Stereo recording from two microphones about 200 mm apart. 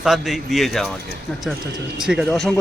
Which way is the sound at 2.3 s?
5° left (ahead or behind).